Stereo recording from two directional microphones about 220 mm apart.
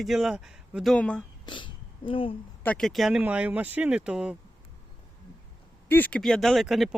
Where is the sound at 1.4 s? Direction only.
20° left (ahead or behind).